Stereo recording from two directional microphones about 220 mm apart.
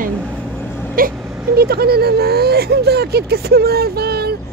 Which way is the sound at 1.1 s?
5° right (ahead or behind).